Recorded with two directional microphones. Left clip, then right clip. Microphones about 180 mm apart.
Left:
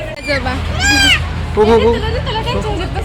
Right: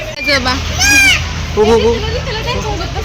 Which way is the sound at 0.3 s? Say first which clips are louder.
Right 5 dB; 45° right (ahead or behind).